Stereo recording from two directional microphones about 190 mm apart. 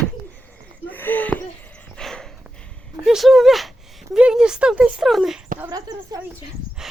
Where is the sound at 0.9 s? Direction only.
10° left (ahead or behind).